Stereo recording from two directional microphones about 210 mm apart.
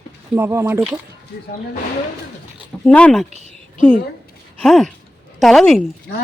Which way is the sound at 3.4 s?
35° left (ahead or behind).